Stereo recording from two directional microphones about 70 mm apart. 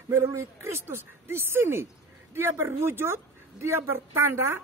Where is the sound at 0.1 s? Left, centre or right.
Right.